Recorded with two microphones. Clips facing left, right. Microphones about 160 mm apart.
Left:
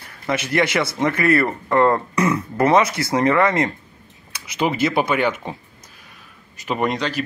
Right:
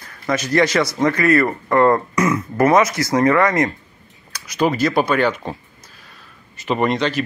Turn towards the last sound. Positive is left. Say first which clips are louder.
# right 3 dB
turn(degrees=5)  # may be behind; listen again after turning